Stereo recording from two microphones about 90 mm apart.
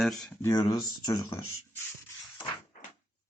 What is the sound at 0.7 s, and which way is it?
Speech, 40° left (ahead or behind).